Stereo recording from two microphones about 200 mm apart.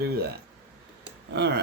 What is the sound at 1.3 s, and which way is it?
Speech, 55° right (ahead or behind).